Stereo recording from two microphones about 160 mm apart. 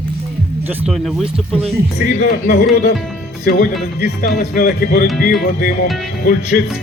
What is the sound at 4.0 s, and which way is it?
Speech, 80° left.